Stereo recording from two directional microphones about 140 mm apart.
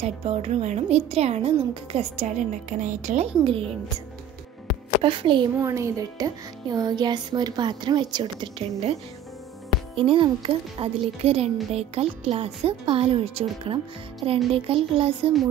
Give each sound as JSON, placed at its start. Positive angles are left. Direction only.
{"t": 0.0, "sound": "speech", "side_deg": -50}
{"t": 3.4, "sound": "speech", "side_deg": -40}
{"t": 5.0, "sound": "speech", "side_deg": -35}
{"t": 5.6, "sound": "speech", "side_deg": -20}
{"t": 9.9, "sound": "speech", "side_deg": -40}